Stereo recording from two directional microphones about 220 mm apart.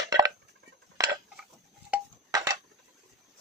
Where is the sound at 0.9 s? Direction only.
15° right (ahead or behind).